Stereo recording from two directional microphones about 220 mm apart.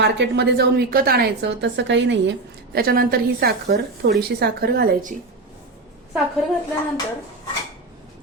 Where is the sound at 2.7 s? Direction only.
45° right (ahead or behind).